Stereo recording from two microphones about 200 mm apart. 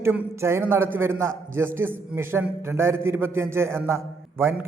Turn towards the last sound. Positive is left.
turn(degrees=-10)  # may be behind; listen again after turning